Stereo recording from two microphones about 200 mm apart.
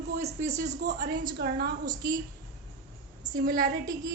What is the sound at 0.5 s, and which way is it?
A woman's voice, 55° right (ahead or behind).